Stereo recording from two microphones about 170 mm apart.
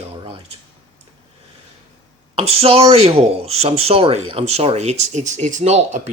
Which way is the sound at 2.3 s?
35° right (ahead or behind).